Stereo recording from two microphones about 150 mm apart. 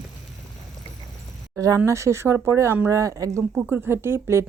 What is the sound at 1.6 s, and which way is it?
Speech, 20° right (ahead or behind).